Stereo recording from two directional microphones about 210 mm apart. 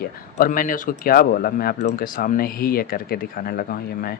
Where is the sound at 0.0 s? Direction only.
45° left (ahead or behind).